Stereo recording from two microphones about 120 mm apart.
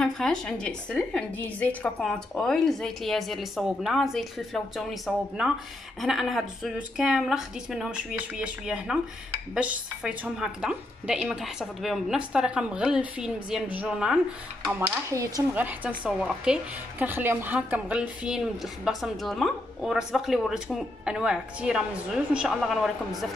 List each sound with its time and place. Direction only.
0.0 s a woman's voice: 5° left (ahead or behind)
15.0 s speech: 25° right (ahead or behind)
15.5 s a woman's voice: 15° right (ahead or behind)